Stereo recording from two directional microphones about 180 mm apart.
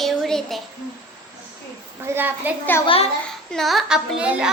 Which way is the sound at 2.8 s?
30° left (ahead or behind).